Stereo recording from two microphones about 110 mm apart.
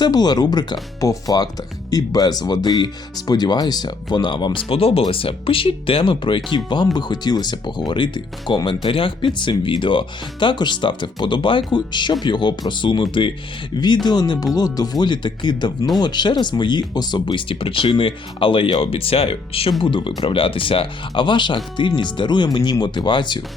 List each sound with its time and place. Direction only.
0.0 s speech: 40° left (ahead or behind)